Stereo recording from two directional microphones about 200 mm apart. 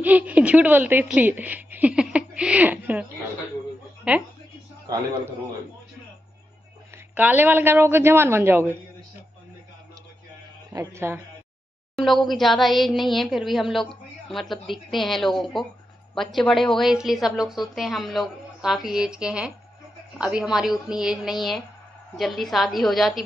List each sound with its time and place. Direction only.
0.0 s a woman's voice: 10° right (ahead or behind)
4.8 s a woman's voice: 15° right (ahead or behind)
7.2 s a woman's voice: 10° right (ahead or behind)
10.7 s a woman's voice: 15° right (ahead or behind)
11.9 s a woman's voice: centre (ahead or behind)